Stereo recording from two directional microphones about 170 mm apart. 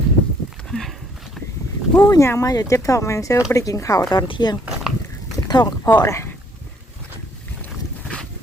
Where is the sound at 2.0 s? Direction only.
20° left (ahead or behind).